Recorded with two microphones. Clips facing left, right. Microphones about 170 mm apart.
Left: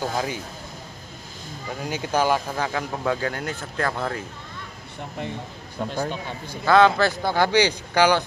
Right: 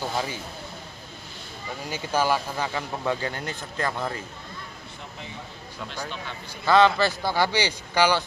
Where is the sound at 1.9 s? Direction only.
15° left (ahead or behind).